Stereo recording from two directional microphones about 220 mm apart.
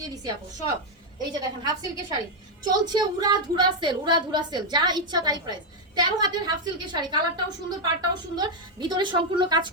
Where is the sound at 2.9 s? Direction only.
20° right (ahead or behind).